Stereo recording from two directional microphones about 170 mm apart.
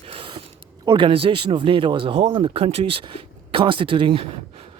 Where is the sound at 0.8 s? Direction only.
30° right (ahead or behind).